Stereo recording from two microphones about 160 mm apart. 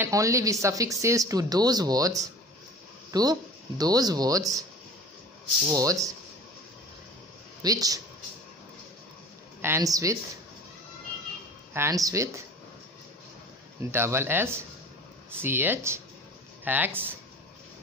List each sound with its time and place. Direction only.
0.0 s speech: 20° right (ahead or behind)
5.7 s speech: 20° right (ahead or behind)
7.6 s speech: 20° right (ahead or behind)
9.6 s speech: 15° right (ahead or behind)
11.7 s speech: 20° right (ahead or behind)
13.9 s speech: 15° right (ahead or behind)